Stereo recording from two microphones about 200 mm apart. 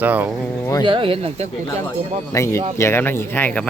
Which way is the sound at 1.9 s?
15° left (ahead or behind).